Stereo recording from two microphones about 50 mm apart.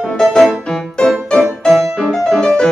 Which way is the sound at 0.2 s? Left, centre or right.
Centre.